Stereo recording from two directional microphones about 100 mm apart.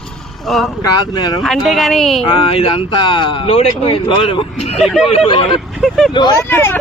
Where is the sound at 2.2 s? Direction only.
55° left (ahead or behind); by 4.9 s 90° left.